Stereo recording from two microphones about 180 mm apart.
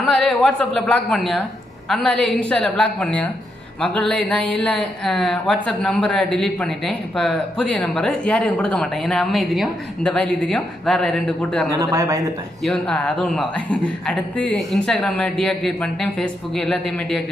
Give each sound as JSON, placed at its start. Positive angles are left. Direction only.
{"t": 0.0, "sound": "speech", "side_deg": 5}
{"t": 11.7, "sound": "speech", "side_deg": -20}
{"t": 12.6, "sound": "speech", "side_deg": 5}